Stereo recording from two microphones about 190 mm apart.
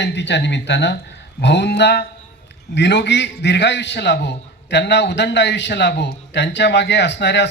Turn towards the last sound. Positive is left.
turn(degrees=65)  # may be behind; listen again after turning